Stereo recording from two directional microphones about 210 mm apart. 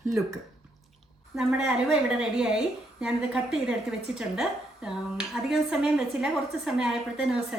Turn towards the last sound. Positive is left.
turn(degrees=-5)  # may be behind; listen again after turning